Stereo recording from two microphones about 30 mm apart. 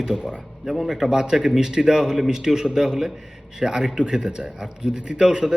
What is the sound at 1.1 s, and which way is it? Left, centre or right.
Speech, right.